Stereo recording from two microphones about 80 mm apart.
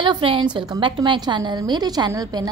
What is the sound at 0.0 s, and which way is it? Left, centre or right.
A woman's voice, right.